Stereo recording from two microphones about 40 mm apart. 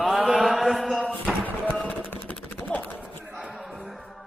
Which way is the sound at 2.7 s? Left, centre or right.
Left.